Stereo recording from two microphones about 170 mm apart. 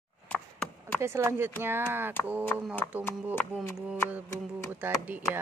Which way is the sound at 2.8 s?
10° left (ahead or behind).